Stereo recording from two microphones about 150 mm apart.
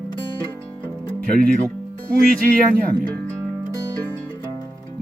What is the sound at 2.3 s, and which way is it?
Speech, 70° right (ahead or behind).